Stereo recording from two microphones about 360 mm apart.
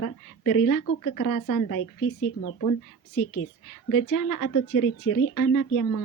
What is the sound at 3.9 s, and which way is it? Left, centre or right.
Speech, left.